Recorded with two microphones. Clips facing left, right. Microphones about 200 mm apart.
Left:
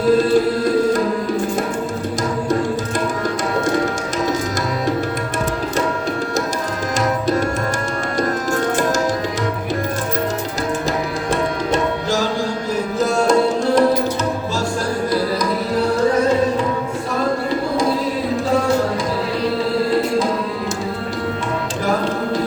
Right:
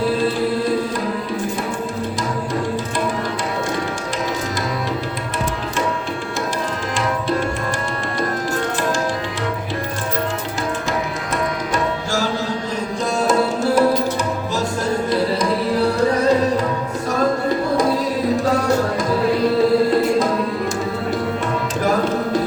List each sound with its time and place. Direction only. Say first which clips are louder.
11.3 s tabla: left 5 dB; 20° left (ahead or behind)
13.0 s music: left 3 dB; centre (ahead or behind)